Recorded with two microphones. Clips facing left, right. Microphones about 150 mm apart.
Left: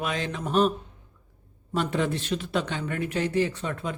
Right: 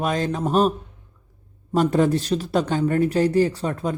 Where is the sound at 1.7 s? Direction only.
40° right (ahead or behind).